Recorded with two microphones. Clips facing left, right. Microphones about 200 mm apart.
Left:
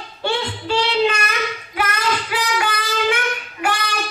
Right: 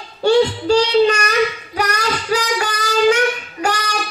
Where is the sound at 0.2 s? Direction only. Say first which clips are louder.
Right 10 dB; 40° right (ahead or behind).